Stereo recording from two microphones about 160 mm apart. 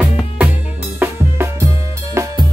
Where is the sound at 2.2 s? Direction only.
15° right (ahead or behind).